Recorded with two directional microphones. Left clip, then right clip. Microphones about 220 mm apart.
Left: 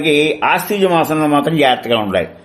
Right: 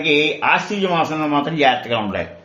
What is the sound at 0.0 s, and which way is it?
A man's voice, 50° left (ahead or behind).